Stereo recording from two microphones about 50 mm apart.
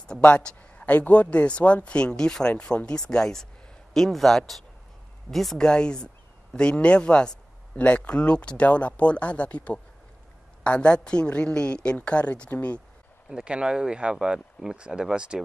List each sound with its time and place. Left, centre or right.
0.2 s speech: left
13.3 s speech: centre